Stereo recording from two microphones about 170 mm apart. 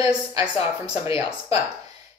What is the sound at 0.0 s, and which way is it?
Speech, 20° right (ahead or behind).